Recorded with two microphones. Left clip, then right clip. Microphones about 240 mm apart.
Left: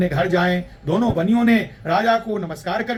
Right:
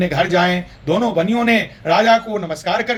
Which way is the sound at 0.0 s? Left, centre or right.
Centre.